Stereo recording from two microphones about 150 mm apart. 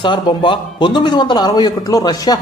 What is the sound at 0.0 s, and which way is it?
A man's voice, 30° left (ahead or behind).